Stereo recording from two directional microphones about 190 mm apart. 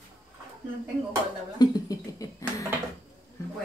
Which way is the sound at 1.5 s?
20° left (ahead or behind).